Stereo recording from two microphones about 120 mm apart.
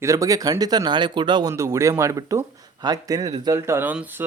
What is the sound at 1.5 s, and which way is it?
Speech, 25° right (ahead or behind).